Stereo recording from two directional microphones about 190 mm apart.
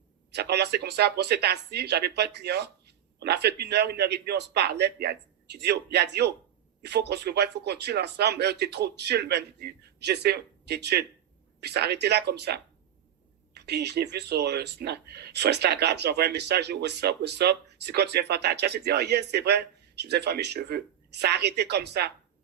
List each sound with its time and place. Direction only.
0.3 s speech: 60° right (ahead or behind)